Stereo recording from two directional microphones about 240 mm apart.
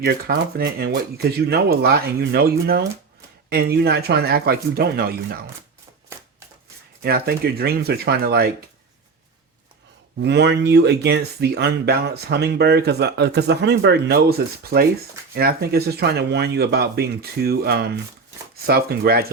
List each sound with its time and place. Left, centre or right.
0.0 s speech: right
7.0 s speech: right
10.2 s speech: right